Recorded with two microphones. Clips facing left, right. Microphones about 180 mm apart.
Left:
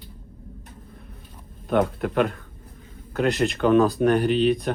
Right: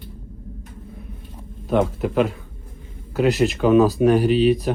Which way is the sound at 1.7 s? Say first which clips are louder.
Right 2 dB; 5° right (ahead or behind).